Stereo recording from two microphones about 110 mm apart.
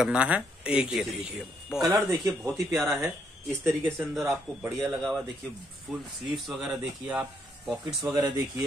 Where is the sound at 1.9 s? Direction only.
30° right (ahead or behind).